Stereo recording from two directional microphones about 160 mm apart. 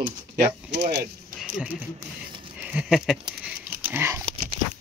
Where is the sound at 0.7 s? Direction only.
90° right.